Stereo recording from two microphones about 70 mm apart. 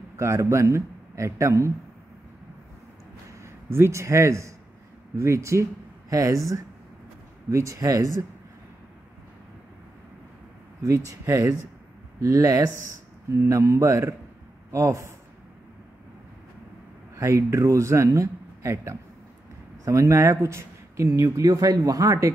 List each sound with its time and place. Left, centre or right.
0.2 s speech: right
3.4 s a man's voice: right
10.8 s speech: right
17.1 s speech: right